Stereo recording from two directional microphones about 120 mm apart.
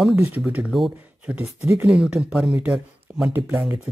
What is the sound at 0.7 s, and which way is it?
Speech, centre (ahead or behind).